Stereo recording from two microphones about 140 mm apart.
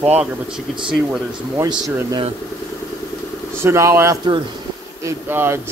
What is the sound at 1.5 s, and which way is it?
Speech, 25° right (ahead or behind).